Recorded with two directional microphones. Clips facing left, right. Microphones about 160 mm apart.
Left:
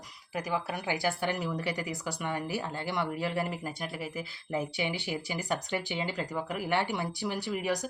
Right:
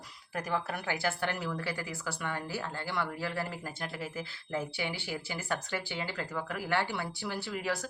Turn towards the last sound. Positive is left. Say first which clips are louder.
# left 3 dB
turn(degrees=15)  # may be behind; listen again after turning